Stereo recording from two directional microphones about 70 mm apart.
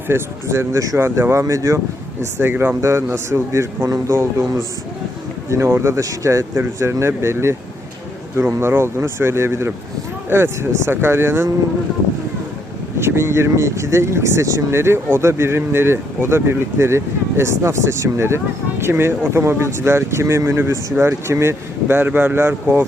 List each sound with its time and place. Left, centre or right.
0.1 s speech: right
2.4 s speech: right
8.5 s speech: right
13.0 s speech: right